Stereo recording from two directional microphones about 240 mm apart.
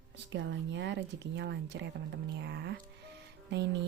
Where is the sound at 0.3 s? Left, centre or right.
Right.